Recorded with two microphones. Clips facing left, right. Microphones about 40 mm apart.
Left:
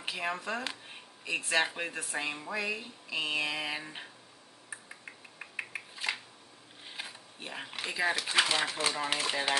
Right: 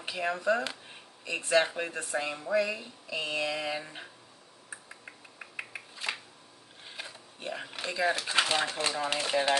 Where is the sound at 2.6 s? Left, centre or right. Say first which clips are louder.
Right 2 dB; centre.